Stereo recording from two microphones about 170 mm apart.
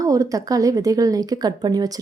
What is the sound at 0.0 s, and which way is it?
Speech, 20° right (ahead or behind).